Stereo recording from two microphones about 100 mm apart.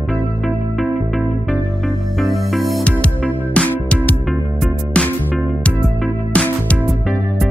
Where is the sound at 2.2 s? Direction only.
Centre (ahead or behind).